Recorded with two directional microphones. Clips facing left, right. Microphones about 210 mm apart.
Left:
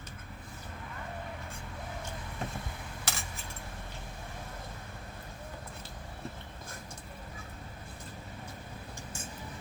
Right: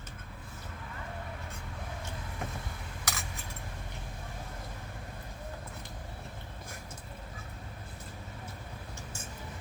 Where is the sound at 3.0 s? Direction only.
30° left (ahead or behind).